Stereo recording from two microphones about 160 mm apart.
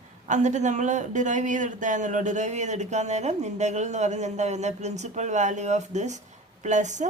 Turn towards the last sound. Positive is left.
turn(degrees=-50)  # may be behind; listen again after turning